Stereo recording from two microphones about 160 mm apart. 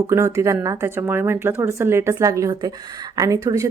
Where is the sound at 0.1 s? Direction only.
15° right (ahead or behind).